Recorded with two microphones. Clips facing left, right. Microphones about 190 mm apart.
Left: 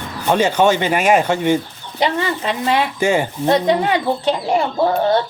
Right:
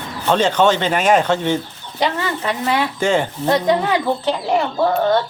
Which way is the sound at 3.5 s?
20° left (ahead or behind).